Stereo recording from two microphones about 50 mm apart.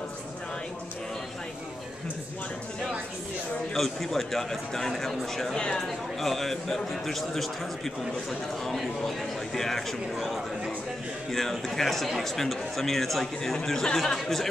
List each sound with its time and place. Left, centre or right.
3.7 s a man's voice: centre
5.6 s a man's voice: centre
5.9 s a man's voice: centre